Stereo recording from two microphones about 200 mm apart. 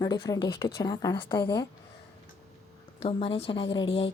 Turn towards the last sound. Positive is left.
turn(degrees=25)  # may be behind; listen again after turning